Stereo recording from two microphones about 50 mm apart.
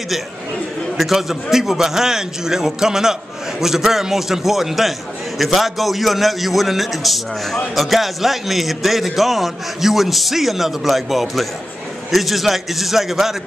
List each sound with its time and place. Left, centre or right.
0.9 s a man's voice: centre